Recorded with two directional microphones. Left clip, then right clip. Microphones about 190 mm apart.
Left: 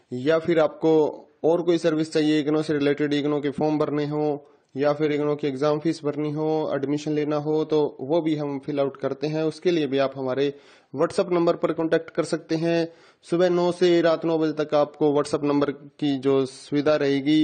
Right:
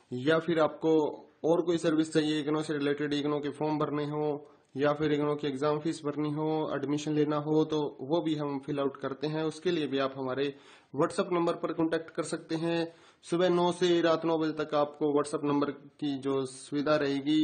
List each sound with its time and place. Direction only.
0.1 s a man's voice: 25° left (ahead or behind)